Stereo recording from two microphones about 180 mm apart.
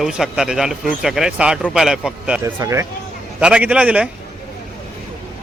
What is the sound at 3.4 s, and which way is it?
Speech, 5° right (ahead or behind).